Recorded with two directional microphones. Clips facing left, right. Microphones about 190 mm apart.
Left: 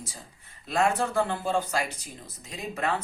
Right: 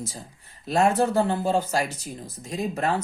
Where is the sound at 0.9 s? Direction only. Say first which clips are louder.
Right 5 dB; 35° right (ahead or behind).